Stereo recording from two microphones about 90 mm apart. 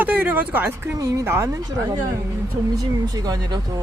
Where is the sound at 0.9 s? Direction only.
35° right (ahead or behind).